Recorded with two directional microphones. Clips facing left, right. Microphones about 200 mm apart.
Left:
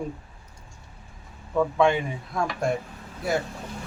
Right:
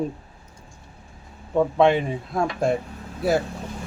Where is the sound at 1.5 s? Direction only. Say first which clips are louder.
Right 3 dB; 30° right (ahead or behind).